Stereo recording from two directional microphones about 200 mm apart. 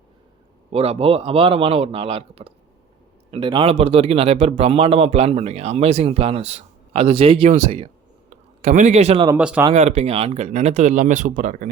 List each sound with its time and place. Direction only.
0.7 s a man's voice: 30° right (ahead or behind)
9.4 s speech: 5° right (ahead or behind)
9.7 s speech: 35° right (ahead or behind)